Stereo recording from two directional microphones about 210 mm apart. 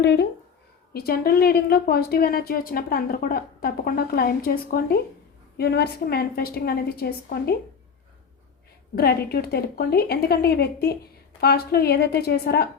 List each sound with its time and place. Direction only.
0.0 s a woman's voice: 55° left (ahead or behind)
9.0 s a woman's voice: 45° left (ahead or behind)